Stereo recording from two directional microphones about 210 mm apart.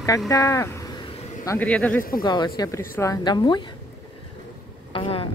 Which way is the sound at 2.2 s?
20° left (ahead or behind).